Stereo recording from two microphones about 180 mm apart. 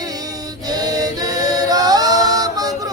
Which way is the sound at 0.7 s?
20° right (ahead or behind).